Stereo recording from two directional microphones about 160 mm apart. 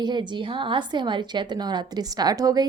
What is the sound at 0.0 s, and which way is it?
A woman's voice, 30° right (ahead or behind).